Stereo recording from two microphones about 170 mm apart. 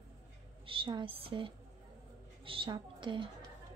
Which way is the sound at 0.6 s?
30° right (ahead or behind).